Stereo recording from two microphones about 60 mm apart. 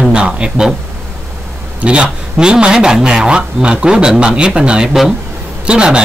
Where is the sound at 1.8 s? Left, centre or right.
Centre.